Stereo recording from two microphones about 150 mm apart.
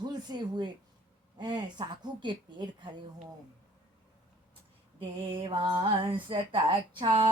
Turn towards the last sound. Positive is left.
turn(degrees=-30)  # may be behind; listen again after turning